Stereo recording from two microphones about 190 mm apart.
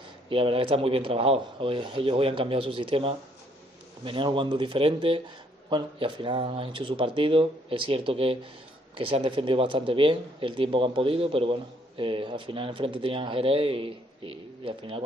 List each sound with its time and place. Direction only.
0.3 s speech: 30° right (ahead or behind)